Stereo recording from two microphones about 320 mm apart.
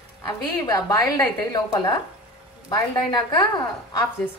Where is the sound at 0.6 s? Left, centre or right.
Centre.